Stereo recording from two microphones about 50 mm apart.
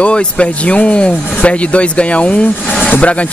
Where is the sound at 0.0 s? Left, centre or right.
Left.